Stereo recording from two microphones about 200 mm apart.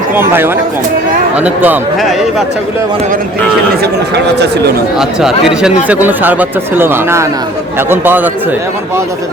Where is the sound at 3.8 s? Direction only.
55° right (ahead or behind).